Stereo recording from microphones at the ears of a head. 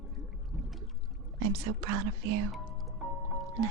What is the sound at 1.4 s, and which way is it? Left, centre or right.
Speech, right.